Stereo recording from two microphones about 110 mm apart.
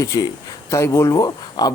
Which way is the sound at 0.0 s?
30° left (ahead or behind).